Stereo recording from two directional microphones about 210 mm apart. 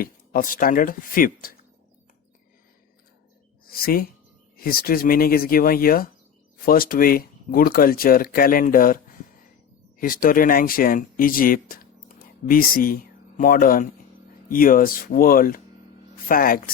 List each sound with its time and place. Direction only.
0.0 s speech: 40° left (ahead or behind)
3.7 s a woman's voice: 45° left (ahead or behind)
10.0 s speech: 40° left (ahead or behind)